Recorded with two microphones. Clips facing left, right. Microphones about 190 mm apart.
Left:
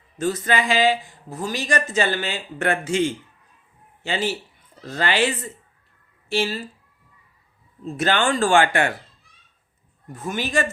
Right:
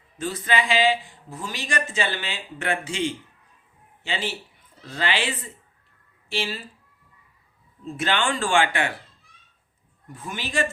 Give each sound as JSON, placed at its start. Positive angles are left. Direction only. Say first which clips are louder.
{"t": 0.2, "sound": "a man's voice", "louder": "left 3 dB", "side_deg": 45}
{"t": 7.9, "sound": "speech", "louder": "left 4 dB", "side_deg": 40}
{"t": 10.2, "sound": "speech", "louder": "left 4 dB", "side_deg": 45}